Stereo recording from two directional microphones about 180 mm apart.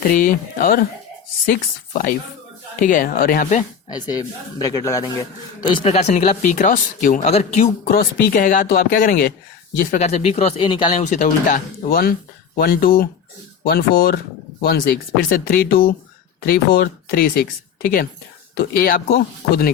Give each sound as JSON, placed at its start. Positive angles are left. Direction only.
{"t": 0.1, "sound": "speech", "side_deg": 50}
{"t": 3.8, "sound": "speech", "side_deg": 20}
{"t": 5.8, "sound": "speech", "side_deg": 35}
{"t": 7.9, "sound": "speech", "side_deg": 55}
{"t": 11.0, "sound": "speech", "side_deg": 45}
{"t": 18.5, "sound": "speech", "side_deg": 55}